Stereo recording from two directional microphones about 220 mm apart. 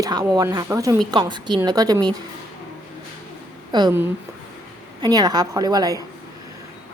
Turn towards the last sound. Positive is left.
turn(degrees=-15)  # may be behind; listen again after turning